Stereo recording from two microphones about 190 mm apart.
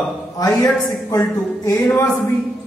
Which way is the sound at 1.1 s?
15° left (ahead or behind).